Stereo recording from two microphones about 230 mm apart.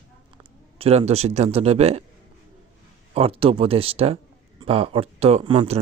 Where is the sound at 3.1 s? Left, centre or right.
Right.